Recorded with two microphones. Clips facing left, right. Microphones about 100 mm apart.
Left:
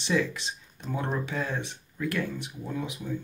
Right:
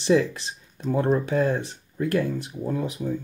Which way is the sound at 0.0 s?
35° right (ahead or behind).